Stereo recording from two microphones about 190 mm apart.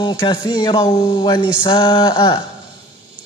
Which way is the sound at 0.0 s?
25° left (ahead or behind).